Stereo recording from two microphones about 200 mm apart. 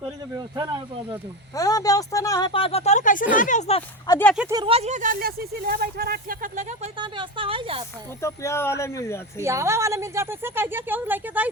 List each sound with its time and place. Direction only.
0.0 s speech: 20° right (ahead or behind)
1.5 s speech: 15° left (ahead or behind)
4.4 s a woman's voice: 15° right (ahead or behind)
4.6 s speech: 30° right (ahead or behind)
7.0 s speech: 25° right (ahead or behind)
8.2 s speech: 15° left (ahead or behind)
9.4 s a woman's voice: 15° right (ahead or behind)